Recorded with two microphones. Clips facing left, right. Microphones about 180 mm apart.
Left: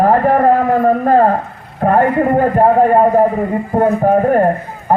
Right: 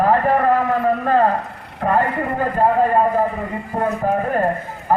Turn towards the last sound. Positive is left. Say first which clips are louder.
# left 8 dB
turn(degrees=45)  # may be behind; listen again after turning